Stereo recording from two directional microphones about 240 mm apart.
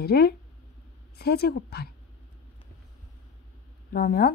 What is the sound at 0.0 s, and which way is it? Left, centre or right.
A woman's voice, left.